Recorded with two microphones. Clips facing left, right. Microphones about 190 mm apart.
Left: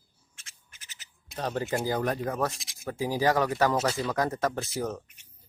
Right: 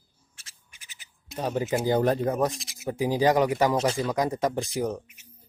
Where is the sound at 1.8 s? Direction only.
25° right (ahead or behind).